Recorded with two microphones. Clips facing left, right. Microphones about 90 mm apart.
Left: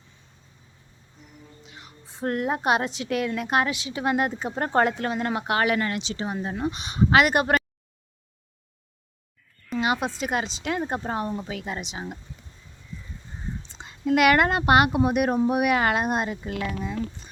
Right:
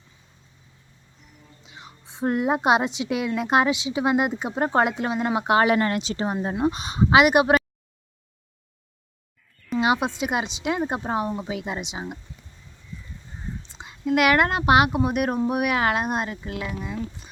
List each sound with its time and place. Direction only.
1.6 s a woman's voice: 20° right (ahead or behind); by 6.3 s 40° right (ahead or behind)
6.3 s a woman's voice: 20° right (ahead or behind)
6.7 s speech: 30° right (ahead or behind)
7.1 s speech: 10° right (ahead or behind)
9.7 s speech: 15° right (ahead or behind)
13.7 s speech: 5° right (ahead or behind)